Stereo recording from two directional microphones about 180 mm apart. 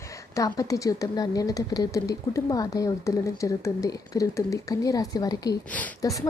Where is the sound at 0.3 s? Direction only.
20° left (ahead or behind).